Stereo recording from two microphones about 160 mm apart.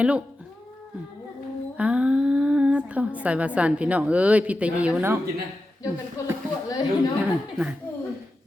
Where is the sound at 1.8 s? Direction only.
10° right (ahead or behind).